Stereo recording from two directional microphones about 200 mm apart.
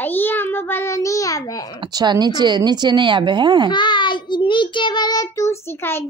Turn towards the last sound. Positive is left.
turn(degrees=10)  # may be behind; listen again after turning